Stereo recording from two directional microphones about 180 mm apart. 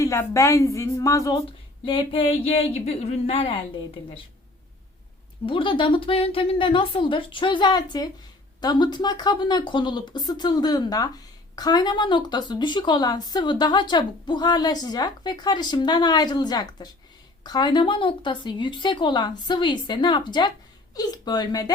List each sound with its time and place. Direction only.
0.0 s a woman's voice: 15° left (ahead or behind)
1.8 s a sound: 30° left (ahead or behind)
5.5 s a woman's voice: 30° left (ahead or behind)